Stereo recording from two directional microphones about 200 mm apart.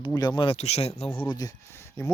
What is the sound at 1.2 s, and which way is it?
Speech, 20° left (ahead or behind).